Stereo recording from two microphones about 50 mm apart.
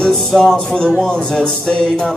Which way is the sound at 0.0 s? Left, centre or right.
Centre.